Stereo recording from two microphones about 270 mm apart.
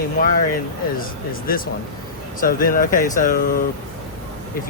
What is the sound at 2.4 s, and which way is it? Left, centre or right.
Speech, left.